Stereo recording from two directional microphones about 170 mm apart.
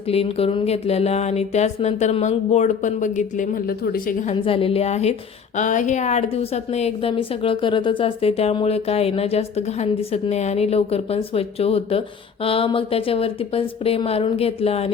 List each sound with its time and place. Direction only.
0.1 s a woman's voice: 35° left (ahead or behind); by 4.1 s 55° left (ahead or behind)
4.3 s a woman's voice: 35° left (ahead or behind)